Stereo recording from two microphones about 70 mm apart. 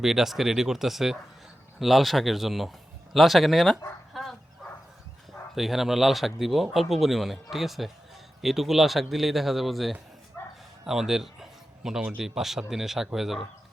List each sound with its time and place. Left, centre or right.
0.0 s speech: centre
4.1 s bow-wow: centre
5.5 s a man's voice: centre